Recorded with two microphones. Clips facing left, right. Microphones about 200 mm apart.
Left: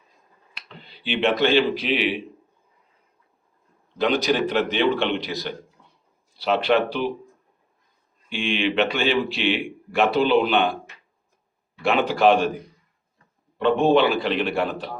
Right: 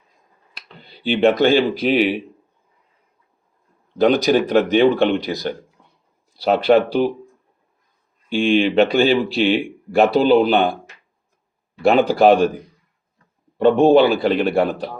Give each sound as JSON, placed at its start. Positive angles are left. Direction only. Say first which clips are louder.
{"t": 1.0, "sound": "speech", "louder": "right 6 dB", "side_deg": -40}
{"t": 3.9, "sound": "speech", "louder": "right 6 dB", "side_deg": -45}
{"t": 8.3, "sound": "speech", "louder": "right 8 dB", "side_deg": -40}
{"t": 11.8, "sound": "speech", "louder": "right 6 dB", "side_deg": -35}
{"t": 13.6, "sound": "speech", "louder": "right 6 dB", "side_deg": -40}